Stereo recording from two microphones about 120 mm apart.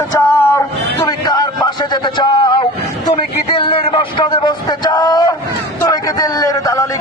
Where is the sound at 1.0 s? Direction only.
35° left (ahead or behind).